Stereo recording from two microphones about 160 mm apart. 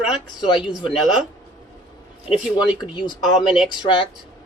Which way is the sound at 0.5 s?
30° left (ahead or behind).